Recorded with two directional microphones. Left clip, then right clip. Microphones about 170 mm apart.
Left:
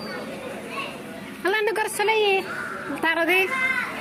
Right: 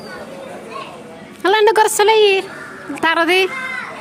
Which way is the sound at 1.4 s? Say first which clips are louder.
Right 11 dB; 35° right (ahead or behind).